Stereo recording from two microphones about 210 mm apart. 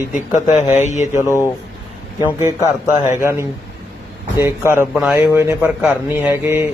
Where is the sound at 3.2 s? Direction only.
10° right (ahead or behind).